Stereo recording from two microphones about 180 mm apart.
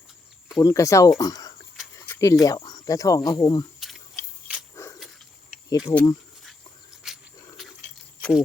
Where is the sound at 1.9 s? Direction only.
15° left (ahead or behind).